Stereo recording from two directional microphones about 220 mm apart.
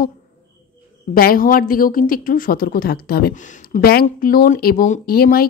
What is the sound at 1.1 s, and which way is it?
A woman's voice, 40° left (ahead or behind).